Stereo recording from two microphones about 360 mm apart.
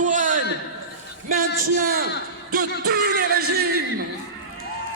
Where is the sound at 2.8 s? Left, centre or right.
Right.